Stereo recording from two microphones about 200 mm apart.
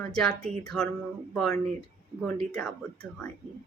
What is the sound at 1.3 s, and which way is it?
Speech, centre (ahead or behind).